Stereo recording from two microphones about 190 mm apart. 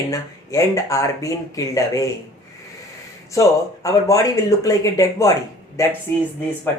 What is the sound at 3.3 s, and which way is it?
Speech, 15° left (ahead or behind).